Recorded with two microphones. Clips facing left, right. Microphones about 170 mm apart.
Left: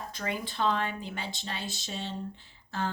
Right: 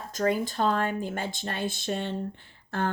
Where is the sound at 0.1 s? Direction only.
45° right (ahead or behind).